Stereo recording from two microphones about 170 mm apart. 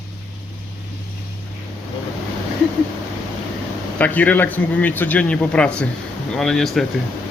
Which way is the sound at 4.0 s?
10° left (ahead or behind).